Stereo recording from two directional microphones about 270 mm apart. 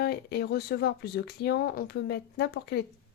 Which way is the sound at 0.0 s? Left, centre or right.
Left.